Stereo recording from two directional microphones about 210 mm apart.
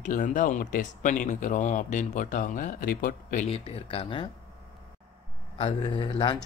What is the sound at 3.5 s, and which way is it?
Speech, 30° left (ahead or behind).